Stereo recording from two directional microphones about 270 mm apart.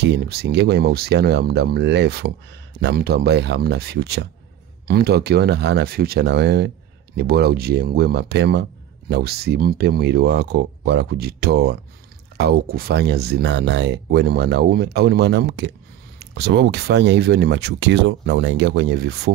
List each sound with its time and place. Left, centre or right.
0.0 s speech: right